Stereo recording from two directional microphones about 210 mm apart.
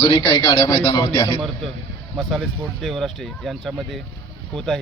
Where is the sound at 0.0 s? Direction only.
20° left (ahead or behind).